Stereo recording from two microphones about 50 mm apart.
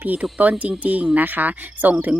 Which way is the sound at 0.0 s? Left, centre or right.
Right.